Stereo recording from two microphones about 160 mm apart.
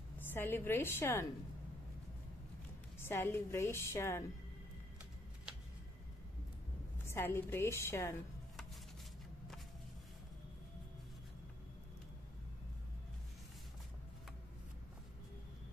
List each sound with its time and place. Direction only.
0.3 s a woman's voice: 15° left (ahead or behind)
3.0 s a woman's voice: 15° left (ahead or behind)
7.1 s a woman's voice: 15° left (ahead or behind)